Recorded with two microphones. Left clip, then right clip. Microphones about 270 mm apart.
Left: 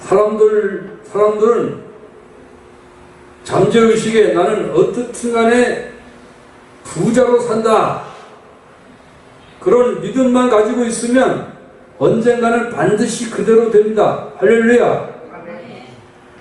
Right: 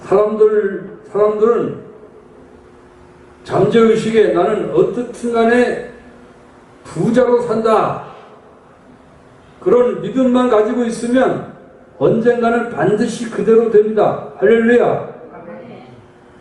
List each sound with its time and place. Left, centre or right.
0.1 s a man's voice: centre
3.7 s a man's voice: centre
5.5 s a man's voice: centre
7.3 s a man's voice: centre
9.6 s a man's voice: centre